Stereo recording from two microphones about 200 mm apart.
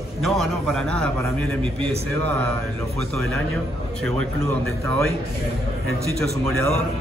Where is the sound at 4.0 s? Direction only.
5° left (ahead or behind).